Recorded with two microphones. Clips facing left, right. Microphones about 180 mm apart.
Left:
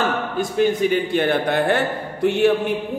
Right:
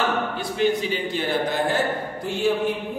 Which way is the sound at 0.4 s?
50° left (ahead or behind).